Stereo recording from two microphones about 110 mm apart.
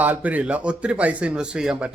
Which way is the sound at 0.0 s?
15° right (ahead or behind).